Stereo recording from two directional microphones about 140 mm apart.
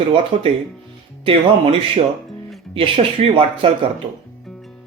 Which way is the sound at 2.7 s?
40° right (ahead or behind).